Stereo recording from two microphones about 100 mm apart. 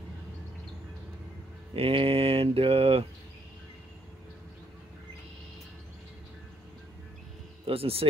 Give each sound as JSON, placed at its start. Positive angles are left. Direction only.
{"t": 1.7, "sound": "speech", "side_deg": -70}
{"t": 7.6, "sound": "speech", "side_deg": -70}